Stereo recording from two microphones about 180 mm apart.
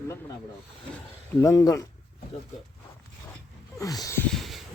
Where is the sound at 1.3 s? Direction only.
20° left (ahead or behind).